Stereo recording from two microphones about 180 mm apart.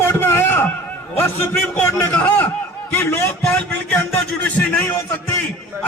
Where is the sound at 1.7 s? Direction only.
10° left (ahead or behind).